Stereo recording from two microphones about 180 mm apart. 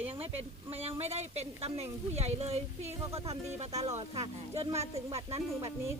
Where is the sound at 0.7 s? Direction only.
35° right (ahead or behind).